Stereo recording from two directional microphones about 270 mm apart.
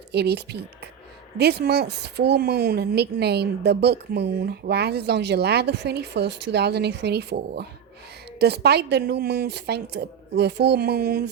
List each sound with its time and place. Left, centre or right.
0.1 s a woman's voice: right